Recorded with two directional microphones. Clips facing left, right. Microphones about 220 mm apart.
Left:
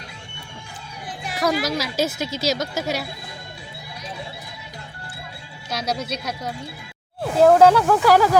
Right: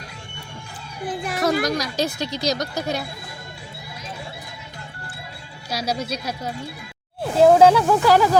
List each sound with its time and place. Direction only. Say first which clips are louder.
1.0 s a sound: right 7 dB; 55° right (ahead or behind)
1.4 s speech: even; centre (ahead or behind)
5.7 s speech: right 1 dB; 10° right (ahead or behind)